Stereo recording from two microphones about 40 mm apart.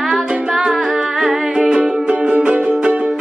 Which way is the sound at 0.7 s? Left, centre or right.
Centre.